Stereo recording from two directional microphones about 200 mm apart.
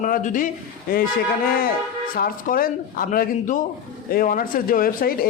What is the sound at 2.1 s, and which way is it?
Speech, 45° left (ahead or behind).